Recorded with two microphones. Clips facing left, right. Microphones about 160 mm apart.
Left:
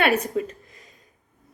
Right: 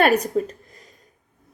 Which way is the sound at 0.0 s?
40° right (ahead or behind).